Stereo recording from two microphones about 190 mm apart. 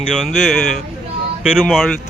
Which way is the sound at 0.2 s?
Centre (ahead or behind).